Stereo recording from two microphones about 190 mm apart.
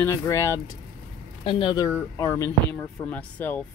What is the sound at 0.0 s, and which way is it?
Speech, 15° left (ahead or behind).